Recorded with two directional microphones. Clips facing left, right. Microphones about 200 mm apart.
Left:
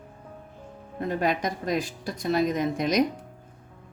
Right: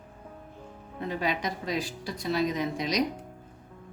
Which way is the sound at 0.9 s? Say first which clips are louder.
Left 4 dB; 45° left (ahead or behind).